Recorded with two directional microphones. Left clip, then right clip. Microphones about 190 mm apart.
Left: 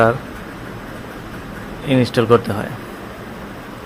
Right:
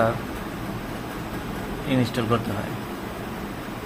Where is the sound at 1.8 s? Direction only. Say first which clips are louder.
Left 10 dB; 40° left (ahead or behind).